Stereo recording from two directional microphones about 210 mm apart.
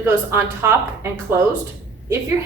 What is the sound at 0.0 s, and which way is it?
Speech, 10° right (ahead or behind).